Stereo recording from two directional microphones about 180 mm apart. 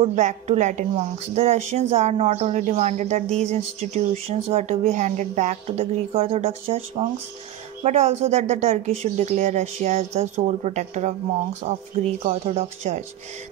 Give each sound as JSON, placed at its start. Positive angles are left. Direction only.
{"t": 0.0, "sound": "speech", "side_deg": -40}